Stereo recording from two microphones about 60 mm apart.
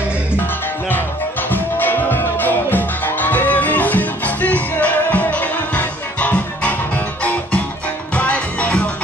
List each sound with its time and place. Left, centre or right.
1.5 s music: left
8.1 s music: left